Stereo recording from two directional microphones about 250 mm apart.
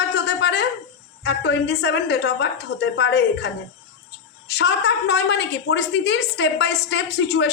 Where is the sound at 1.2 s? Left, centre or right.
Left.